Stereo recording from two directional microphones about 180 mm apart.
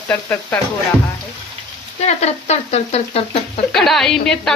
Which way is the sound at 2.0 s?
40° left (ahead or behind).